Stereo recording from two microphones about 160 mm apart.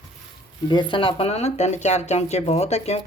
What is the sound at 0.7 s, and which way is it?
Speech, 30° left (ahead or behind).